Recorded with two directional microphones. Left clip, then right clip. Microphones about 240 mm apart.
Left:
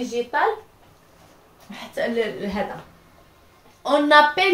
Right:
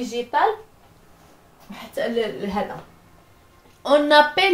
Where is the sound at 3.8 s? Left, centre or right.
Right.